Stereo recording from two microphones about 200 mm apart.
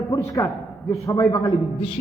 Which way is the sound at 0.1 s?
15° left (ahead or behind).